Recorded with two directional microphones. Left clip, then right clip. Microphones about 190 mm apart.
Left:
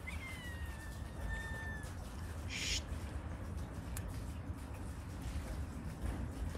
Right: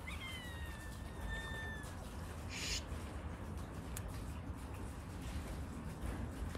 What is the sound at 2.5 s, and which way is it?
Owl, 15° left (ahead or behind).